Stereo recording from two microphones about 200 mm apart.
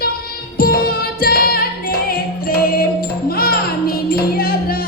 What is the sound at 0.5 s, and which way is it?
Music, 50° left (ahead or behind).